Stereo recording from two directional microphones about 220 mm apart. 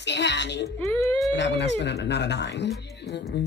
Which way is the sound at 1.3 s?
50° left (ahead or behind).